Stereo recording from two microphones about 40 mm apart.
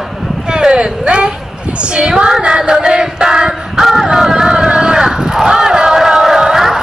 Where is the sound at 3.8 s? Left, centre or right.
Centre.